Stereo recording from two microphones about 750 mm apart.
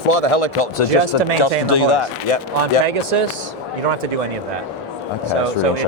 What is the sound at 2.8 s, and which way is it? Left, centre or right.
Speech, right.